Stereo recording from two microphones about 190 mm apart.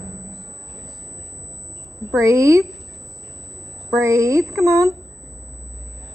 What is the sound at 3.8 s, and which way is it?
Speech, 15° right (ahead or behind).